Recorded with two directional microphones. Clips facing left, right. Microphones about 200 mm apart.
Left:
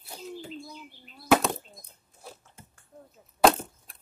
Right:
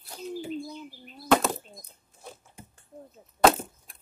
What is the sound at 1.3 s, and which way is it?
Speech, centre (ahead or behind).